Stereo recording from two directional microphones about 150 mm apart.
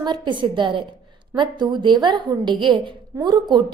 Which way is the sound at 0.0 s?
30° right (ahead or behind).